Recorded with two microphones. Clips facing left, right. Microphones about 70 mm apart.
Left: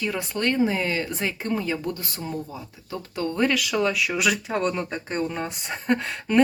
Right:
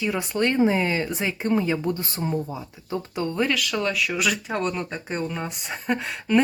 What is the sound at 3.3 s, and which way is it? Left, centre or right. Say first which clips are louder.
Speech: left 2 dB; centre.